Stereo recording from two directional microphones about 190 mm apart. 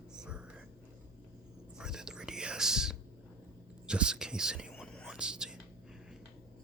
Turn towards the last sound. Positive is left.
turn(degrees=-5)  # may be behind; listen again after turning